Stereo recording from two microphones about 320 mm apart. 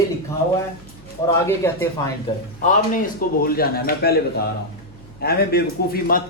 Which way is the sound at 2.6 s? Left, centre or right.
Left.